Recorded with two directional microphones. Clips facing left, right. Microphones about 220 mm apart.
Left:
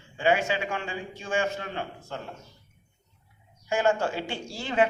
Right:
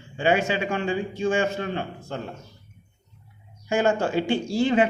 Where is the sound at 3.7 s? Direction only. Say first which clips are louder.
Right 3 dB; 20° right (ahead or behind).